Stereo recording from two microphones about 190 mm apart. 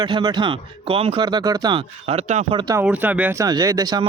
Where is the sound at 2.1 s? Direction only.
35° right (ahead or behind).